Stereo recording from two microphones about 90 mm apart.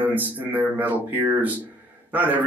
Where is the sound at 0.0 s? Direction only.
20° right (ahead or behind).